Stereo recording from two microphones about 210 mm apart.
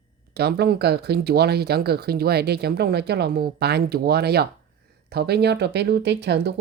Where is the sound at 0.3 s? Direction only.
50° right (ahead or behind).